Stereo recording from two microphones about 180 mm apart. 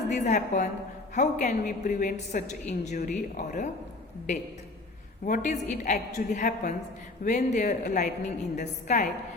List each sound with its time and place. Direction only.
0.1 s a woman's voice: 40° left (ahead or behind)
5.2 s a woman's voice: 45° left (ahead or behind)